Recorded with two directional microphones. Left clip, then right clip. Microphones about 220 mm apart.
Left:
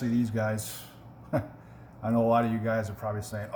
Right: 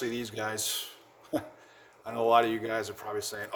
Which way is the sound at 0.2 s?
45° right (ahead or behind).